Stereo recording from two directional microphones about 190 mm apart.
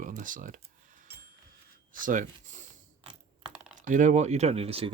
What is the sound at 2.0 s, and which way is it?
Speech, 45° right (ahead or behind).